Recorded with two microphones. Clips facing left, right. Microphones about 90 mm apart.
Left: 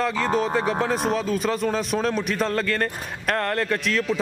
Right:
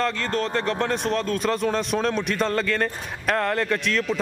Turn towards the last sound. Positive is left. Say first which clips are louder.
# even
turn(degrees=0)  # may be behind; listen again after turning